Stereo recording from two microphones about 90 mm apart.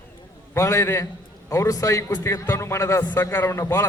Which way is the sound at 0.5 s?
35° left (ahead or behind).